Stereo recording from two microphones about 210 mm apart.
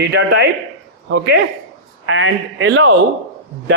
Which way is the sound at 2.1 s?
65° right (ahead or behind).